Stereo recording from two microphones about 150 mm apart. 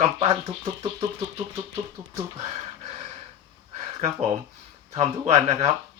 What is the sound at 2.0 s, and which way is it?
Speech, 20° right (ahead or behind).